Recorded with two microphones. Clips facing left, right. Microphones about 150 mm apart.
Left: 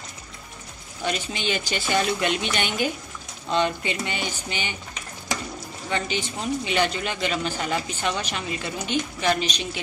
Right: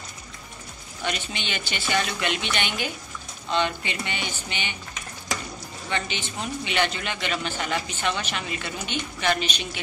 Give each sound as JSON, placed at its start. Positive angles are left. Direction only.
{"t": 1.0, "sound": "a man's voice", "side_deg": 40}
{"t": 5.9, "sound": "a man's voice", "side_deg": 40}